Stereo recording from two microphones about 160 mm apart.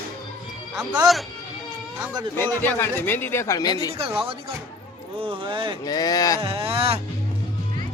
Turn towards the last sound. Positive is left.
turn(degrees=-40)  # may be behind; listen again after turning